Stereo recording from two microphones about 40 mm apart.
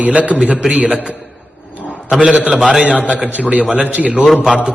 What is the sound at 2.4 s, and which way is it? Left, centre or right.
Speech, centre.